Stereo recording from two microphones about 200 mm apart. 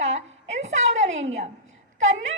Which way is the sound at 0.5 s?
35° right (ahead or behind).